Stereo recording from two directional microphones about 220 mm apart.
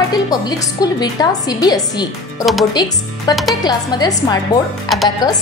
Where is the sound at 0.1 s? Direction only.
15° left (ahead or behind).